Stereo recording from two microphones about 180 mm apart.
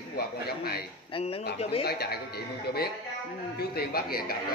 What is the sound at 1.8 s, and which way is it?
A man's voice, 60° left (ahead or behind).